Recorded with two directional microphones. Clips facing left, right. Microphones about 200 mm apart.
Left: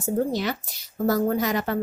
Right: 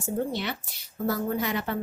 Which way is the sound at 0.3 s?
40° left (ahead or behind).